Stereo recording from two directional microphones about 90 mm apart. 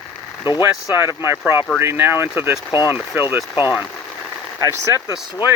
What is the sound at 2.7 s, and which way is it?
Speech, 45° left (ahead or behind).